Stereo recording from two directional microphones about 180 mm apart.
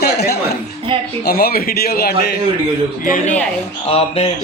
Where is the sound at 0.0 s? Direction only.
65° left (ahead or behind).